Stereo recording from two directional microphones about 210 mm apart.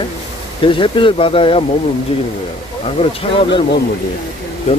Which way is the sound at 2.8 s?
25° left (ahead or behind).